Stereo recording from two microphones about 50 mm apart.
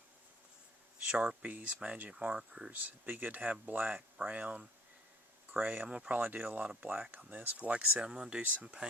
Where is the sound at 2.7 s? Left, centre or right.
Right.